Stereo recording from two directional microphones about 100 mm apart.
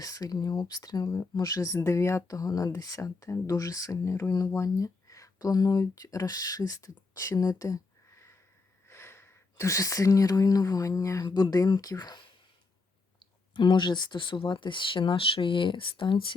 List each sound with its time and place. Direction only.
0.0 s speech: 35° left (ahead or behind)
7.1 s a sound: 35° left (ahead or behind)
8.9 s speech: 25° left (ahead or behind); by 12.3 s 45° left (ahead or behind)
13.5 s speech: 50° left (ahead or behind)